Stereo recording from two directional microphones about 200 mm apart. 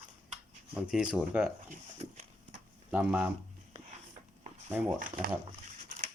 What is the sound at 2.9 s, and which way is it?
Speech, 5° right (ahead or behind).